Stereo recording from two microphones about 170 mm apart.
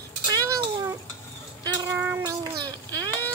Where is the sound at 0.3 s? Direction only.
20° right (ahead or behind).